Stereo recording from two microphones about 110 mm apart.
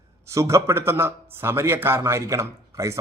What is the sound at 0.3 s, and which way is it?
A man's voice, 25° right (ahead or behind).